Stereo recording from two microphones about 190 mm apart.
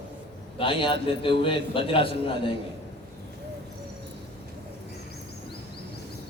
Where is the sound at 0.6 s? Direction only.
25° left (ahead or behind).